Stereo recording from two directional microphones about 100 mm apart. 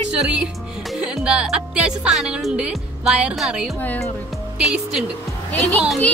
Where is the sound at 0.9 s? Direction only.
5° right (ahead or behind).